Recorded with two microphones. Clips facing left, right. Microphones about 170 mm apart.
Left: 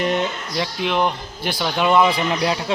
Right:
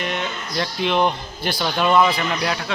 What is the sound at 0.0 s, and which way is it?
Speech, 35° left (ahead or behind).